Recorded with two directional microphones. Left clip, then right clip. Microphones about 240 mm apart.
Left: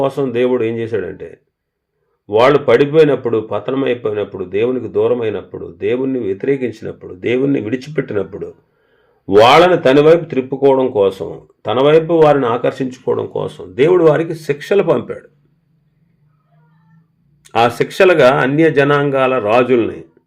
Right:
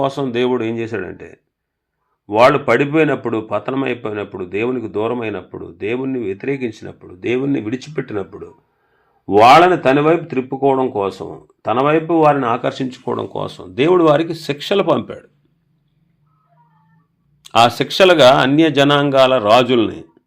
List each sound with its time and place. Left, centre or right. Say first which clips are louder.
0.0 s speech: left 3 dB; right
9.8 s speech: left 5 dB; right
17.4 s speech: right 1 dB; right